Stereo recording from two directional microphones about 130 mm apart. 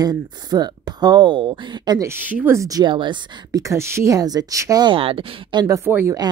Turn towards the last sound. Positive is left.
turn(degrees=-15)  # may be behind; listen again after turning